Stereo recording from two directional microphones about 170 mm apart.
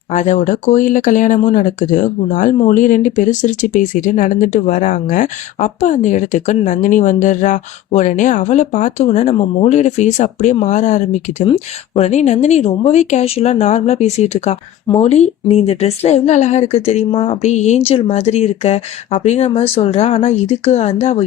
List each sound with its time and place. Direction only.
0.1 s speech: 45° left (ahead or behind)